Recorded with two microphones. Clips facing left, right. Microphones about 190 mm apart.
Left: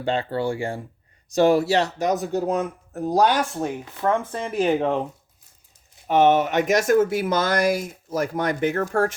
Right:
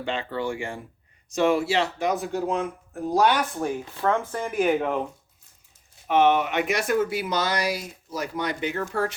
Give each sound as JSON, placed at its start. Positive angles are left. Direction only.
{"t": 0.0, "sound": "speech", "side_deg": 35}
{"t": 6.1, "sound": "speech", "side_deg": 40}